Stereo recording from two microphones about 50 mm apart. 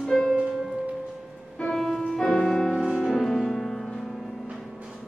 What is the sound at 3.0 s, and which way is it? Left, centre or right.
Music, centre.